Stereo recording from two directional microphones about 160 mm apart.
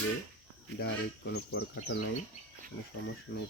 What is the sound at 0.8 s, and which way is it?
Speech, 90° left.